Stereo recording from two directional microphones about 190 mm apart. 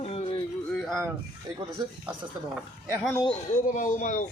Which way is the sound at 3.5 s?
45° left (ahead or behind).